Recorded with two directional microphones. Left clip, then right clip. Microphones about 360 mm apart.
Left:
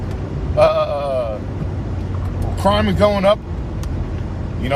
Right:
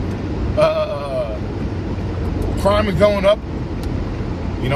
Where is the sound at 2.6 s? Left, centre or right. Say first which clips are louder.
Even; centre.